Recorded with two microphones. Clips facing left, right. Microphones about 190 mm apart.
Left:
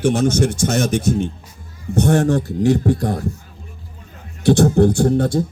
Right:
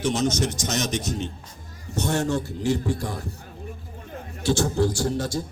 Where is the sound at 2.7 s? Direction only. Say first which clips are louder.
Left 8 dB; 60° left (ahead or behind).